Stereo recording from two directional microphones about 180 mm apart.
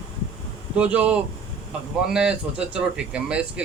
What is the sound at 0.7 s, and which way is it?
Speech, 5° right (ahead or behind).